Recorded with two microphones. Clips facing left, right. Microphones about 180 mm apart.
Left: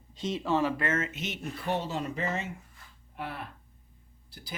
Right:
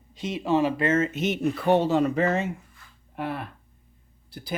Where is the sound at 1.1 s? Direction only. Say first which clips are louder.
Right 12 dB; 55° right (ahead or behind).